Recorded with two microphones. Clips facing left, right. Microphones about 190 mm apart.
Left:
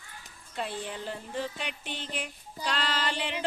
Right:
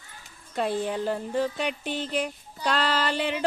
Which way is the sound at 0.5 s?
40° right (ahead or behind).